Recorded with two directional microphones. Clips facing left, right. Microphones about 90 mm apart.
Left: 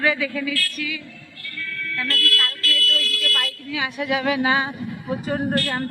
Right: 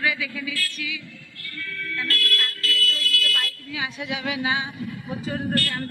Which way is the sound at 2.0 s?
60° left (ahead or behind).